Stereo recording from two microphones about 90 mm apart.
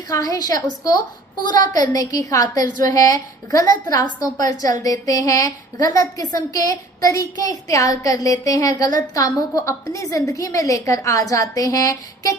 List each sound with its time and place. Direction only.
0.1 s a woman's voice: 40° left (ahead or behind)